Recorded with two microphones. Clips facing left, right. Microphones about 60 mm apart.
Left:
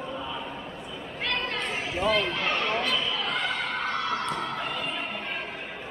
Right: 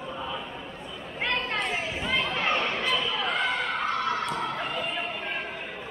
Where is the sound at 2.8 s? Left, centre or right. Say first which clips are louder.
Even; centre.